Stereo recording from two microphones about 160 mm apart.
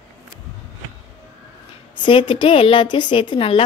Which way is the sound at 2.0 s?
30° left (ahead or behind).